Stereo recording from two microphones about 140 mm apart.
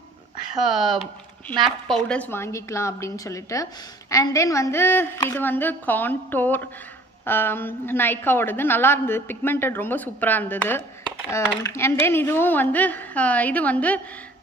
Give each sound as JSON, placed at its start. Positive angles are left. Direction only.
{"t": 0.6, "sound": "a woman's voice", "side_deg": -5}